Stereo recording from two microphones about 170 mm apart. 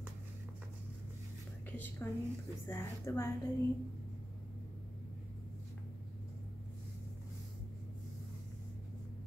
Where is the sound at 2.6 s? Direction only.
15° left (ahead or behind).